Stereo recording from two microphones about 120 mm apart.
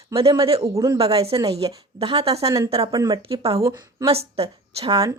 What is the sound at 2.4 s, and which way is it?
Speech, 25° right (ahead or behind).